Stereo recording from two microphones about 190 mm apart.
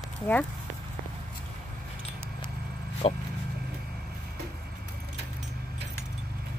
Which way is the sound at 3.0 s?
30° left (ahead or behind).